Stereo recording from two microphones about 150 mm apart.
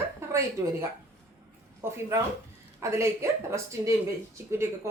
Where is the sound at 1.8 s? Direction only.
15° right (ahead or behind).